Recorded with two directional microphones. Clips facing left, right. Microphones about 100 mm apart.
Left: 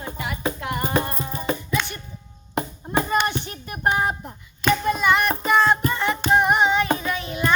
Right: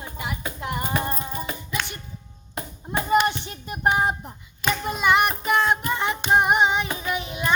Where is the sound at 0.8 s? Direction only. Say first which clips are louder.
Left 3 dB; 35° left (ahead or behind).